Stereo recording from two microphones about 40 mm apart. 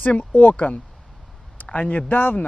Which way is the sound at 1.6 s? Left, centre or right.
Left.